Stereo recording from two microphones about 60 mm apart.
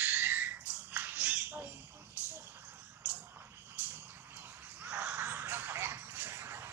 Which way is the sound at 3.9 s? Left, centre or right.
Right.